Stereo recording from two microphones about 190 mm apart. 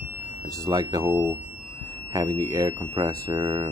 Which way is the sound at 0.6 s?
20° right (ahead or behind).